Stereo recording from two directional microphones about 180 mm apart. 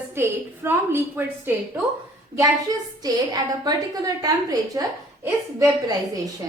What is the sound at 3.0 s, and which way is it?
A woman's voice, 20° right (ahead or behind).